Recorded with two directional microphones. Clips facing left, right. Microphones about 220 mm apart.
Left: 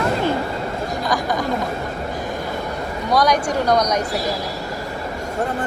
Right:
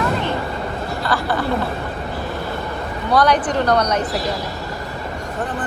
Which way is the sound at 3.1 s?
10° left (ahead or behind).